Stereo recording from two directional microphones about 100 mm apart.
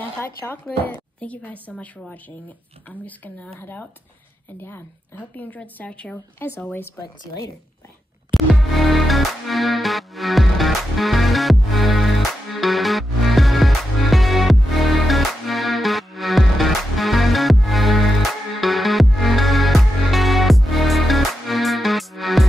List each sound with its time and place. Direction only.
0.2 s speech: 20° left (ahead or behind)
6.1 s speech: 25° left (ahead or behind)
8.3 s music: centre (ahead or behind)